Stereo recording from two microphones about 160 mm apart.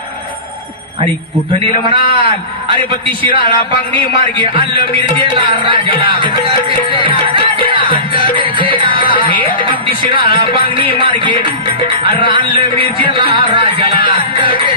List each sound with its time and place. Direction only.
2.0 s a man's voice: 30° right (ahead or behind)
6.9 s music: 30° right (ahead or behind)